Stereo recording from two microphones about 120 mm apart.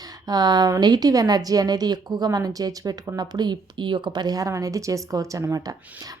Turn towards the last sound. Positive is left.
turn(degrees=-25)  # may be behind; listen again after turning